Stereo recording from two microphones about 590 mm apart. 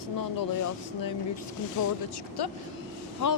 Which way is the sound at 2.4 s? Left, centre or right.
Left.